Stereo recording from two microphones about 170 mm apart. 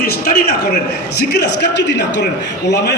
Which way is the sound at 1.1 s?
80° left.